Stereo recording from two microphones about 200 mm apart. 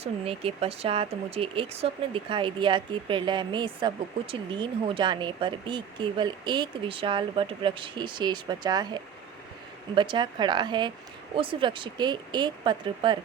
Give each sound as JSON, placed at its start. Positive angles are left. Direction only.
{"t": 0.0, "sound": "speech", "side_deg": -30}